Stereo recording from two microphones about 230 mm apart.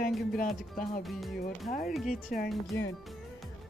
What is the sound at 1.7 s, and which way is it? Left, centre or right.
Speech, left.